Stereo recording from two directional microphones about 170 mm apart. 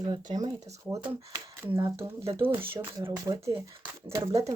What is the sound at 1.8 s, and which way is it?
Speech, 15° right (ahead or behind).